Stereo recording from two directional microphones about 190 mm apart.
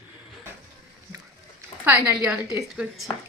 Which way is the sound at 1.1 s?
10° right (ahead or behind).